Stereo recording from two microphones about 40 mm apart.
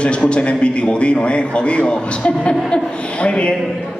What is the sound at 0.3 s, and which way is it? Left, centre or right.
A woman's voice, left.